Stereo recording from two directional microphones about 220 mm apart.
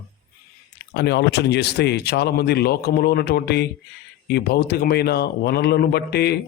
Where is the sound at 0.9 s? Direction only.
50° left (ahead or behind).